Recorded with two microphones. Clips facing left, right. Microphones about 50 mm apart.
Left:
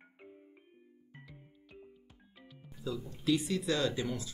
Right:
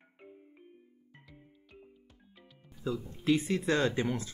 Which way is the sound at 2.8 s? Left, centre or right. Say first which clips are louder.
Right 3 dB; right.